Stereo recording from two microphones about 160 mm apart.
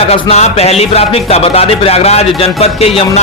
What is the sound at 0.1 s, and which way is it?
Speech, 40° left (ahead or behind).